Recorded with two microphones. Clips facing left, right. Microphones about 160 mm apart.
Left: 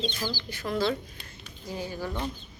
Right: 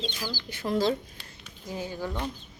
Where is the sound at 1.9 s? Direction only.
15° right (ahead or behind).